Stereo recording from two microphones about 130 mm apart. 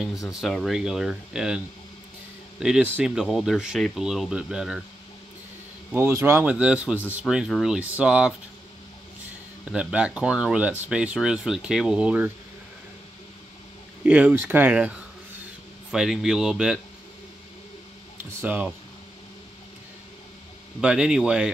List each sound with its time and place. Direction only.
0.3 s speech: centre (ahead or behind)
2.6 s speech: 10° right (ahead or behind)
5.9 s speech: 15° right (ahead or behind)
9.7 s speech: 5° right (ahead or behind)
14.0 s speech: 10° right (ahead or behind)
18.4 s speech: 15° right (ahead or behind)
20.8 s speech: 5° right (ahead or behind)